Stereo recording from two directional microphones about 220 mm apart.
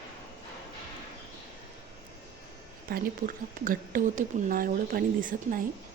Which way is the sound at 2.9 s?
40° right (ahead or behind).